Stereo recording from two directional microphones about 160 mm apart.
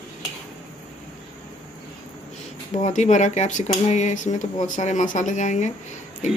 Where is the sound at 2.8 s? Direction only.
50° left (ahead or behind).